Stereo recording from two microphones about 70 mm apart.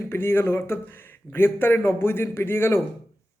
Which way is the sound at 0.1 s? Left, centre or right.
Left.